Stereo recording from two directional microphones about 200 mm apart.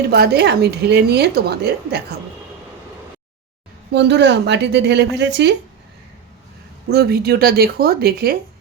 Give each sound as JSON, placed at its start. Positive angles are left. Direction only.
{"t": 0.1, "sound": "a woman's voice", "side_deg": -55}
{"t": 3.9, "sound": "a woman's voice", "side_deg": -60}
{"t": 6.9, "sound": "speech", "side_deg": -50}